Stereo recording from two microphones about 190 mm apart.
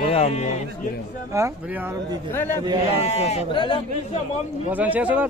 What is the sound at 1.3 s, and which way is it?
Speech, 10° right (ahead or behind).